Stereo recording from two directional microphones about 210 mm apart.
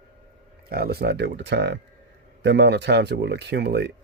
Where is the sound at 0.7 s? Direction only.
50° right (ahead or behind).